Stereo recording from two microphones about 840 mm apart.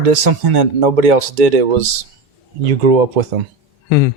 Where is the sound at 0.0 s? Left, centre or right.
Right.